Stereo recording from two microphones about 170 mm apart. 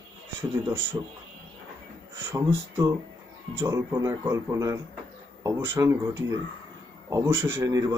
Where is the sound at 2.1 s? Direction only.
15° right (ahead or behind).